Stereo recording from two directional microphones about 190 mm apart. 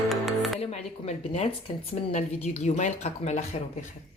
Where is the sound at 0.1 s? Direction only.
Centre (ahead or behind).